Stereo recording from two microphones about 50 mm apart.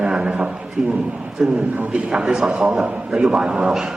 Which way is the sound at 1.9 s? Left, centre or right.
Centre.